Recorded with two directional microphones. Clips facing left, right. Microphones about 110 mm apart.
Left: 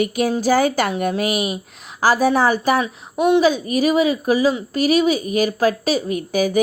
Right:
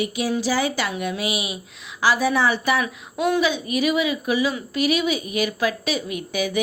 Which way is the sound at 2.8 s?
25° left (ahead or behind).